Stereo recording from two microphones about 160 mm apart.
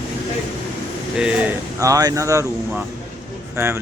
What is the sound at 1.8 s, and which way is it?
Speech, 20° right (ahead or behind).